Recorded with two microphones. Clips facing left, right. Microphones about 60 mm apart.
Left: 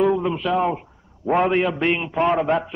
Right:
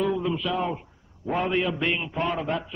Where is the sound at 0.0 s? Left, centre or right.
Left.